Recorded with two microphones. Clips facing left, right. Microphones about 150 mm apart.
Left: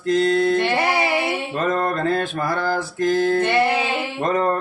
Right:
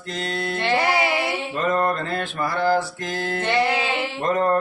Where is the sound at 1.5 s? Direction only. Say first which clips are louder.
Right 2 dB; 45° left (ahead or behind).